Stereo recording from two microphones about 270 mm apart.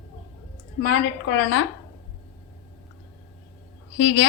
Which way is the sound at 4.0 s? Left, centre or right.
Left.